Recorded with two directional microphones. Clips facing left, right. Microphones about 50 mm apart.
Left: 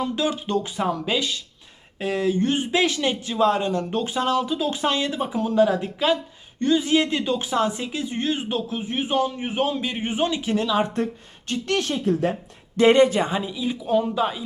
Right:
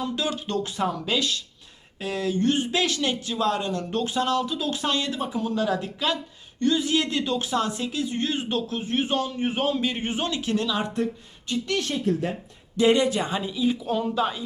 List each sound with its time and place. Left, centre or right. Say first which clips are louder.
0.0 s a man's voice: left 3 dB; left
2.0 s a man's voice: left 3 dB; left
11.7 s speech: left 3 dB; left
12.7 s speech: left 4 dB; left
13.3 s speech: right 1 dB; centre